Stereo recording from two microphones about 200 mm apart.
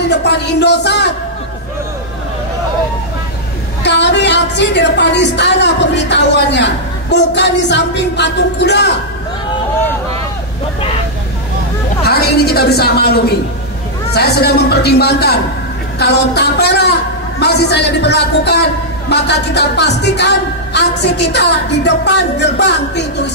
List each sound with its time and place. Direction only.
0.1 s a man's voice: 60° left (ahead or behind)
3.8 s a man's voice: 60° left (ahead or behind)
12.1 s a woman's voice: 50° left (ahead or behind)